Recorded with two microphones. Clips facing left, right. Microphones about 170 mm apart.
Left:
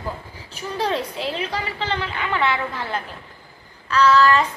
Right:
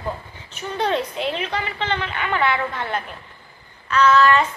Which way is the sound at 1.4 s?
35° left (ahead or behind).